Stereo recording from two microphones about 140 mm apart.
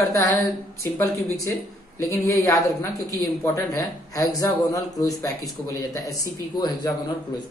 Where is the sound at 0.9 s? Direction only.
20° left (ahead or behind).